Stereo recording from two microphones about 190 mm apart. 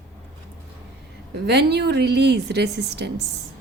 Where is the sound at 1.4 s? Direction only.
60° right (ahead or behind).